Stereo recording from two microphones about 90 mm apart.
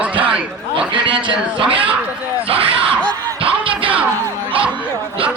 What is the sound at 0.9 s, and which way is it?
Speech, 65° right (ahead or behind).